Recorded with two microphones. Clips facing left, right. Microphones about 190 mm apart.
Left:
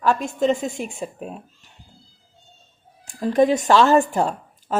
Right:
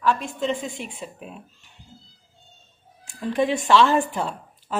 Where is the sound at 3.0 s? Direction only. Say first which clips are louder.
Left 6 dB; 40° left (ahead or behind).